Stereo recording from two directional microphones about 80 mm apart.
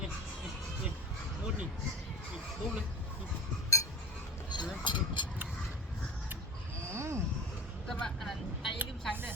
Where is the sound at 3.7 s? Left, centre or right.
Left.